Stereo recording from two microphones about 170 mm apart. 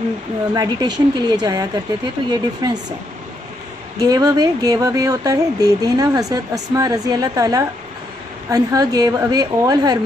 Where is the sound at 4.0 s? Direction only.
20° right (ahead or behind).